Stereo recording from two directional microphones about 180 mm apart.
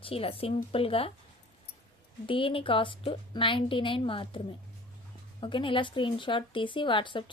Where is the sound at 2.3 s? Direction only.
30° left (ahead or behind).